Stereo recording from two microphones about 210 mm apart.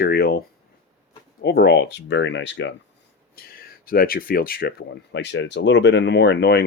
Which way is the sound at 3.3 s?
45° left (ahead or behind).